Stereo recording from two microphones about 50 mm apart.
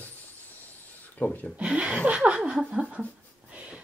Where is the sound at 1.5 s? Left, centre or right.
Right.